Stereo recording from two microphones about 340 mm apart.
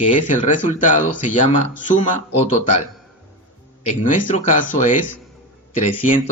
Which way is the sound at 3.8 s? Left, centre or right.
Left.